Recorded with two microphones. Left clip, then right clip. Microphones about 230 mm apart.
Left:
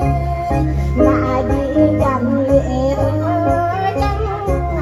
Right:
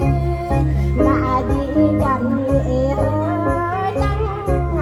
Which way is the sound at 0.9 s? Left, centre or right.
Right.